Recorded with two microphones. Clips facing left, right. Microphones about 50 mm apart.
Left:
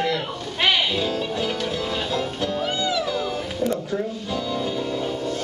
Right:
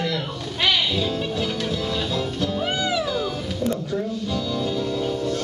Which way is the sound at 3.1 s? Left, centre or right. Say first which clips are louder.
Even; centre.